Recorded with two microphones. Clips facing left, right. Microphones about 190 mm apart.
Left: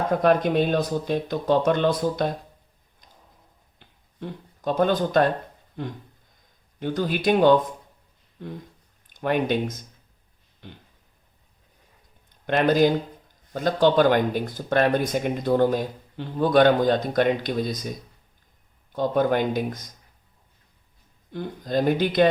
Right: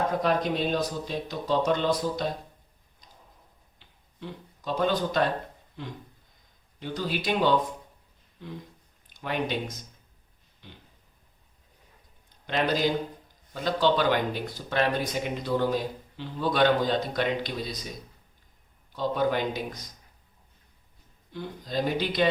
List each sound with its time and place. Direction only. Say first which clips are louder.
0.2 s speech: left 6 dB; 55° left (ahead or behind)
3.8 s a sound: left 6 dB; 50° left (ahead or behind)
5.8 s speech: left 6 dB; 50° left (ahead or behind)
10.6 s a sound: left 6 dB; 55° left (ahead or behind)
12.5 s speech: left 7 dB; 50° left (ahead or behind)
18.9 s speech: left 5 dB; 50° left (ahead or behind)
21.3 s speech: left 6 dB; 50° left (ahead or behind)